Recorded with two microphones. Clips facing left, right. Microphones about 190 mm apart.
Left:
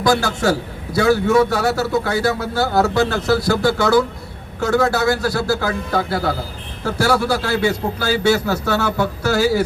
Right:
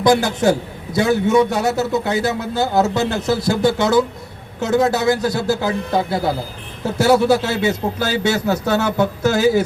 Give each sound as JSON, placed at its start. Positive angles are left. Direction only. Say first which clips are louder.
{"t": 0.0, "sound": "a man's voice", "louder": "right 3 dB", "side_deg": -20}